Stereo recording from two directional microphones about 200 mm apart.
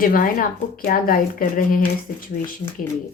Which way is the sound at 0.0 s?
45° left (ahead or behind).